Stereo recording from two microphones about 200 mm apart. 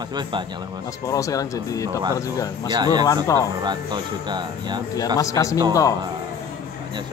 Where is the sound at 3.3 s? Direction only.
15° left (ahead or behind).